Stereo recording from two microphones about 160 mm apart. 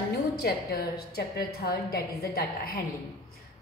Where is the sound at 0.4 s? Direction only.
85° left.